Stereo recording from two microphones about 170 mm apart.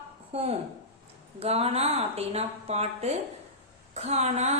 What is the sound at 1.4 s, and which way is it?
A woman's voice, 35° right (ahead or behind).